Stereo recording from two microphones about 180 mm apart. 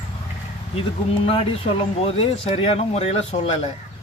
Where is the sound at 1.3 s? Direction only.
30° left (ahead or behind).